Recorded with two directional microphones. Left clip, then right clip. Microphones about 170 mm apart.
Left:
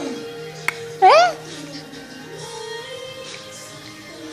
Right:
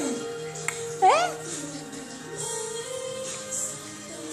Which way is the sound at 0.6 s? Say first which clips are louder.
Left 7 dB; 45° left (ahead or behind).